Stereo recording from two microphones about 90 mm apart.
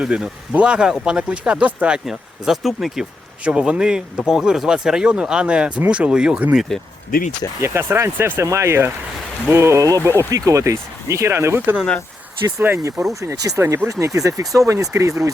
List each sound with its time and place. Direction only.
0.0 s speech: 10° right (ahead or behind)
7.6 s speech: 30° right (ahead or behind)